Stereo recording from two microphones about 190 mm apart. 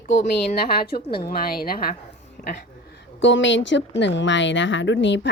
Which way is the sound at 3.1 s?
75° left (ahead or behind).